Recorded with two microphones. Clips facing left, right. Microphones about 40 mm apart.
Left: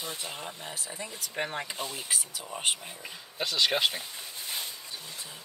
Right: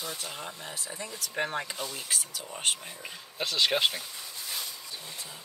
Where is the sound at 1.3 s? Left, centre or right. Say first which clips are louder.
Right 2 dB; centre.